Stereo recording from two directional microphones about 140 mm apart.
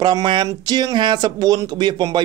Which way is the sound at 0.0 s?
30° right (ahead or behind).